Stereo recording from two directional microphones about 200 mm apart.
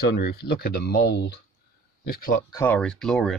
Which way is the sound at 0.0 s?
50° left (ahead or behind).